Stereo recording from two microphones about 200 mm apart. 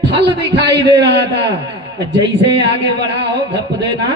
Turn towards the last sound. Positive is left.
turn(degrees=-60)  # may be behind; listen again after turning